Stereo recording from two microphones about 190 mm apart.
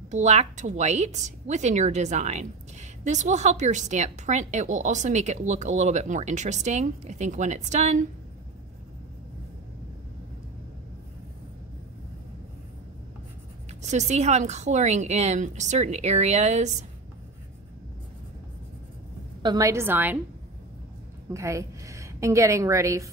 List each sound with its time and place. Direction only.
0.1 s a woman's voice: 35° right (ahead or behind)
13.8 s a woman's voice: 35° right (ahead or behind)
19.4 s a woman's voice: 20° right (ahead or behind)
21.3 s a woman's voice: 15° right (ahead or behind)